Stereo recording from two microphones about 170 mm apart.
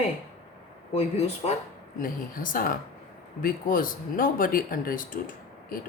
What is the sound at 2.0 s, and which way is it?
Speech, 55° left (ahead or behind).